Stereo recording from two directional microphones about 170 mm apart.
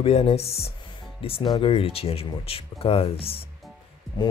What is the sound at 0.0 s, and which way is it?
Speech, 35° left (ahead or behind).